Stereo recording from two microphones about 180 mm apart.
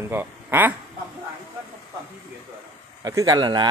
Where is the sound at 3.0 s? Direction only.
20° right (ahead or behind).